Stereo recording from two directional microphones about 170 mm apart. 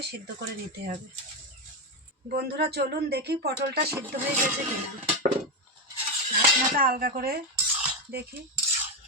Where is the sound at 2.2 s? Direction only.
70° right (ahead or behind).